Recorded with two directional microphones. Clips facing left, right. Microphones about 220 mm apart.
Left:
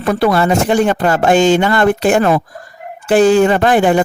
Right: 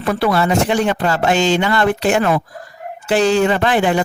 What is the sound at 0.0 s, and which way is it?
Speech, 45° left (ahead or behind).